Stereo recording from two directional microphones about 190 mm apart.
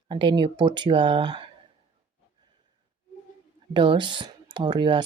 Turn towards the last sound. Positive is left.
turn(degrees=-25)  # may be behind; listen again after turning